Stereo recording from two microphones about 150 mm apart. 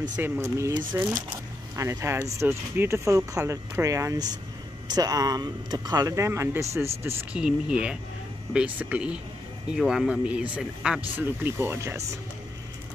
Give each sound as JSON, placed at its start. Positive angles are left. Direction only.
{"t": 0.2, "sound": "speech", "side_deg": -20}